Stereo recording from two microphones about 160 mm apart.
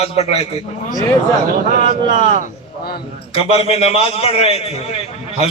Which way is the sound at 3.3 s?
40° left (ahead or behind).